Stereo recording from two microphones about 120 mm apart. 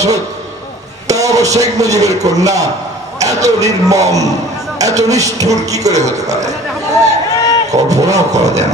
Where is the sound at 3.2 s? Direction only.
30° right (ahead or behind).